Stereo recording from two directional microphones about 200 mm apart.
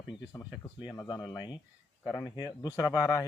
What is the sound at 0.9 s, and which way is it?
Speech, 20° left (ahead or behind).